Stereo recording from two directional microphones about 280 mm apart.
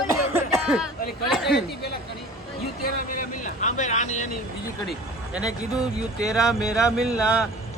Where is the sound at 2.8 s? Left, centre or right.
Left.